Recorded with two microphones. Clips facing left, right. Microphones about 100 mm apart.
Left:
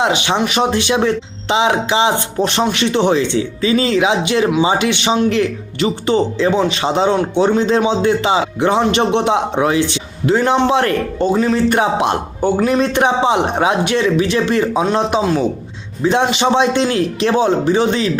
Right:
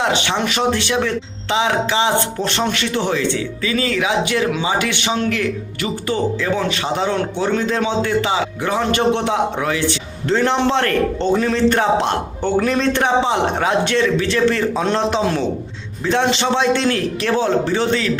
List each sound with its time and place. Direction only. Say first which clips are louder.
0.0 s a man's voice: left 3 dB; 15° left (ahead or behind)
15.2 s speech: left 3 dB; centre (ahead or behind)
16.0 s a man's voice: left 3 dB; 15° left (ahead or behind)